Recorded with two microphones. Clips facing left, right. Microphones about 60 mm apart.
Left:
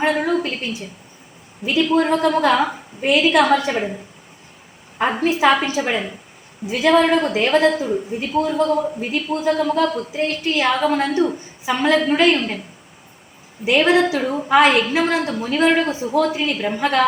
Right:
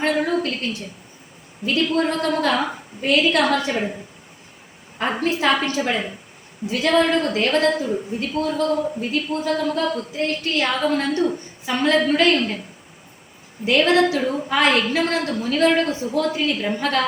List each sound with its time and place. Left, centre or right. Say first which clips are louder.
0.0 s a woman's voice: left 2 dB; centre
4.9 s a woman's voice: left 4 dB; centre
13.7 s a woman's voice: left 1 dB; centre